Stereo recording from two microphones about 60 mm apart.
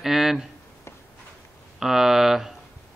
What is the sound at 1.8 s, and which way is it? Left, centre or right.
Speech, centre.